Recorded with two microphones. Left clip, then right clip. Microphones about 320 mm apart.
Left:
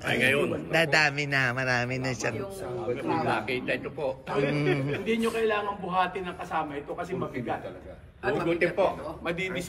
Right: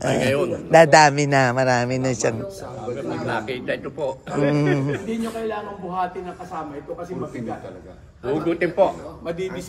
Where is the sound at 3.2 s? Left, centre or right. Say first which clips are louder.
Right 3 dB; right.